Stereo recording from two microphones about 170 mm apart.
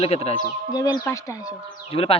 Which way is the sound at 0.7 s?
20° left (ahead or behind).